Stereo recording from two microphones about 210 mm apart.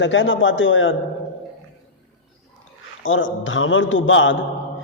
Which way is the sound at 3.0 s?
65° left (ahead or behind).